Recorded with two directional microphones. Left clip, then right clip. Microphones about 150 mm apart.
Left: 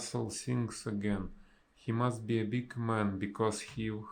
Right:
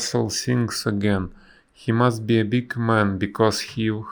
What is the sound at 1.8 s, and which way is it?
Speech, 45° right (ahead or behind).